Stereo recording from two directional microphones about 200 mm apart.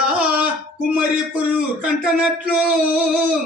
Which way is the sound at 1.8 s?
5° right (ahead or behind).